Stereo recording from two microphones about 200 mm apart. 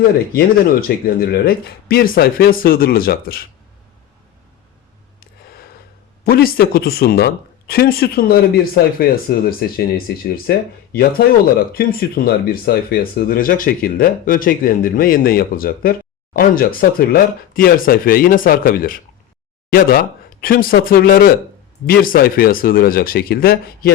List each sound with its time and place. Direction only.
0.3 s speech: 50° left (ahead or behind)
6.2 s speech: 50° left (ahead or behind)
11.7 s speech: 50° left (ahead or behind)